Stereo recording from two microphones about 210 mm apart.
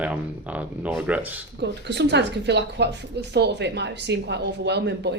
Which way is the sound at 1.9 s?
55° right (ahead or behind).